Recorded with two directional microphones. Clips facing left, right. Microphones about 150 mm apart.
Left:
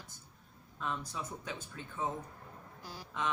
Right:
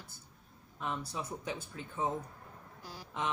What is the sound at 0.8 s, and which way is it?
Speech, 15° right (ahead or behind).